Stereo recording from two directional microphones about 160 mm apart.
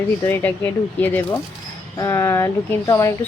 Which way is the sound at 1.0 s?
10° left (ahead or behind).